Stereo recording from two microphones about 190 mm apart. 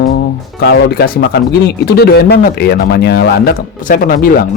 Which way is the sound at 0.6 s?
60° left (ahead or behind).